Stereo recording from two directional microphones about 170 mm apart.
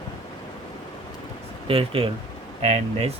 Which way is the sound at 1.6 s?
35° right (ahead or behind).